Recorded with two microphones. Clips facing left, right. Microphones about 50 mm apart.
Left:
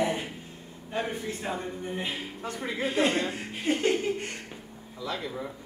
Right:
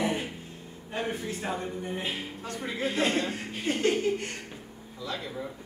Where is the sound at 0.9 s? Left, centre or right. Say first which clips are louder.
Left 1 dB; centre.